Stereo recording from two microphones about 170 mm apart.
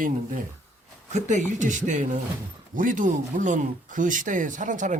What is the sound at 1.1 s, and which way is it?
Speech, 45° right (ahead or behind).